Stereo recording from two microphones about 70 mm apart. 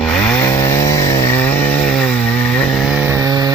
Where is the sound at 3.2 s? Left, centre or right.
Right.